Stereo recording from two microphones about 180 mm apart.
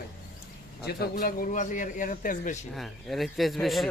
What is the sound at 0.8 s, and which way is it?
A man's voice, 60° left (ahead or behind).